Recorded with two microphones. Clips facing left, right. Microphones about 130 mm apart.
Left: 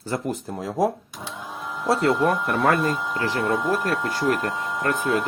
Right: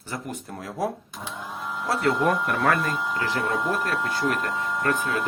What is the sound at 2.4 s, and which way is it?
Speech, 30° left (ahead or behind).